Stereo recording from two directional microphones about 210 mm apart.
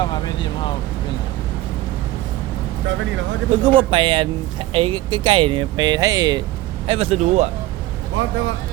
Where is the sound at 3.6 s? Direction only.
25° right (ahead or behind).